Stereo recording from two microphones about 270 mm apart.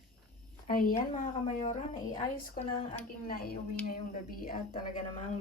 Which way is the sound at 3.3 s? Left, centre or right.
Left.